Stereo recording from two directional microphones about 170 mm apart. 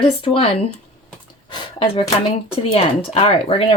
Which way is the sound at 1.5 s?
30° left (ahead or behind).